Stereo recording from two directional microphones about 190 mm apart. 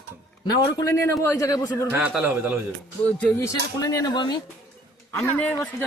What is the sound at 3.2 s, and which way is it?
Speech, 5° left (ahead or behind).